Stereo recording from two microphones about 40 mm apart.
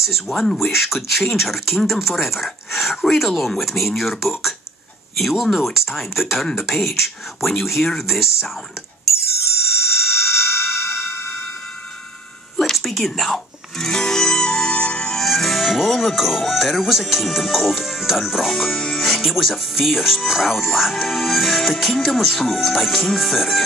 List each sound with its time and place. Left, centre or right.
0.3 s speech: centre
0.6 s speech: centre
5.4 s speech: centre
10.0 s a sound: centre
12.5 s a sound: centre
13.7 s music: centre
15.1 s speech: centre